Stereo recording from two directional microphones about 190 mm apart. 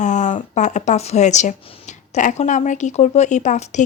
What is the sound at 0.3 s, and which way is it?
Speech, 40° left (ahead or behind).